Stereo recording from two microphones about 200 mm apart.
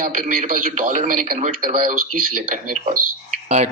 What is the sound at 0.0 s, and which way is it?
A man's voice, 40° right (ahead or behind).